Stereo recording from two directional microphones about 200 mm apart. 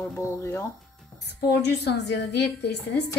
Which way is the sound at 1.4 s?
55° left (ahead or behind).